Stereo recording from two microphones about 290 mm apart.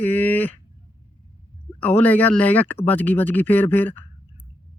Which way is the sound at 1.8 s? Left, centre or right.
Centre.